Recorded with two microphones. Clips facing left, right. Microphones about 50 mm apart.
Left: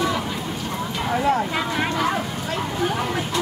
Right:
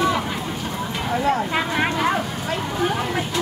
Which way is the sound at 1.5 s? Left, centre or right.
Right.